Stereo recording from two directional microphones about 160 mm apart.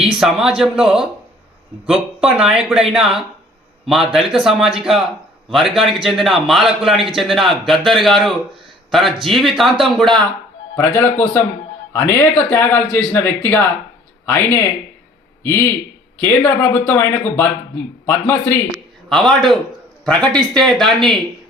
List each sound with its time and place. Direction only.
0.0 s a man's voice: 5° right (ahead or behind)
10.8 s a man's voice: 15° left (ahead or behind)